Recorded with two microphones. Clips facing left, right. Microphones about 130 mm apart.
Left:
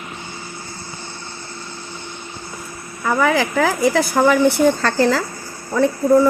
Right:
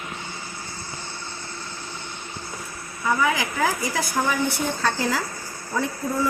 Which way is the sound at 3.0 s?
65° left (ahead or behind).